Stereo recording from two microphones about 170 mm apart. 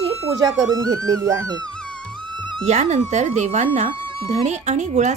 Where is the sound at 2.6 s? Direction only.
40° right (ahead or behind).